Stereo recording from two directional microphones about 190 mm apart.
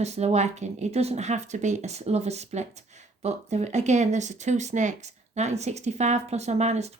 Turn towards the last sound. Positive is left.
turn(degrees=-35)  # may be behind; listen again after turning